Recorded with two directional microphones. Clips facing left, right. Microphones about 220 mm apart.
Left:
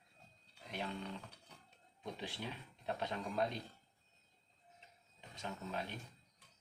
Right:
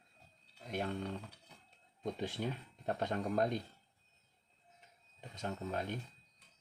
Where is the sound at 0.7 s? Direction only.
45° right (ahead or behind).